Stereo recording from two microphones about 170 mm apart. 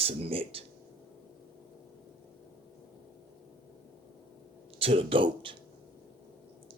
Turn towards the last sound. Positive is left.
turn(degrees=-30)  # may be behind; listen again after turning